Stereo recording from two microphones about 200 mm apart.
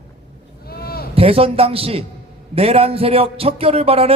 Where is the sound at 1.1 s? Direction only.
30° right (ahead or behind).